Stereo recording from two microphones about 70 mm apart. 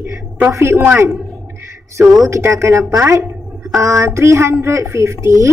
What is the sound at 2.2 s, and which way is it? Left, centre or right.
A woman's voice, right.